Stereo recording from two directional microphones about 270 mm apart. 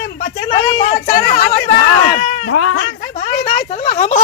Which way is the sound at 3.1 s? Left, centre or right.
Left.